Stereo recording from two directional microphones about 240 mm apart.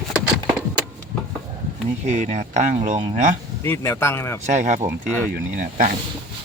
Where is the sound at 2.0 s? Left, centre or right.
Right.